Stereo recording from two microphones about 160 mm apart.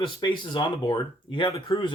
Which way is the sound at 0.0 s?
30° left (ahead or behind).